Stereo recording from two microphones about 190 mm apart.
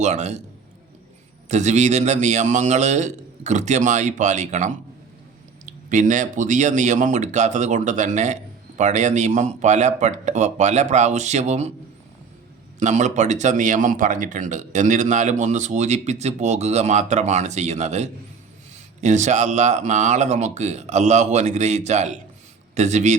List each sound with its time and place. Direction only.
0.0 s speech: 35° right (ahead or behind)
1.5 s speech: 40° right (ahead or behind)
12.8 s a man's voice: 40° right (ahead or behind)